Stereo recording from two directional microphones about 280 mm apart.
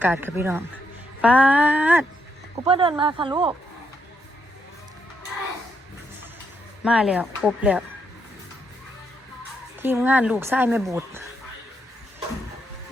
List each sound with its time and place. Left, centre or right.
0.0 s a woman's voice: centre
2.6 s a woman's voice: centre
6.8 s speech: centre
9.8 s a woman's voice: centre